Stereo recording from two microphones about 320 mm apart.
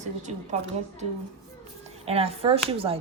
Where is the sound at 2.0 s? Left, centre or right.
Centre.